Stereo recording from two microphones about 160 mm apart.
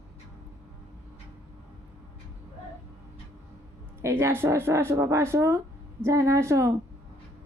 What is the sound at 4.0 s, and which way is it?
A woman's voice, 15° right (ahead or behind).